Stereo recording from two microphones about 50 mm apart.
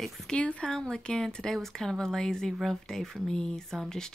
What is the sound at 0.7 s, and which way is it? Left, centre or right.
Speech, centre.